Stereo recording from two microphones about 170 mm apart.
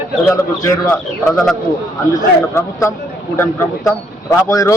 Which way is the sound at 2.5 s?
15° left (ahead or behind).